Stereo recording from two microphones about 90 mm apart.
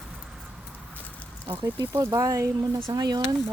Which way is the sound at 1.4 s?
65° right (ahead or behind).